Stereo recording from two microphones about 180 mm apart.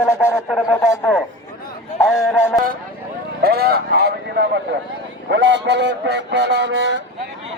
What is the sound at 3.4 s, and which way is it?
A man's voice, 60° right (ahead or behind).